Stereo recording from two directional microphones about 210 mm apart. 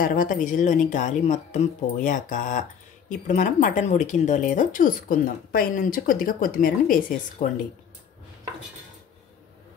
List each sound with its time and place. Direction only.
0.0 s speech: 40° left (ahead or behind)